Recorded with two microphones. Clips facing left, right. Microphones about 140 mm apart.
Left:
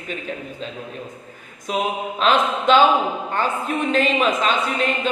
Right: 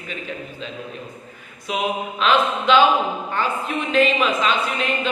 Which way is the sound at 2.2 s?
45° left (ahead or behind).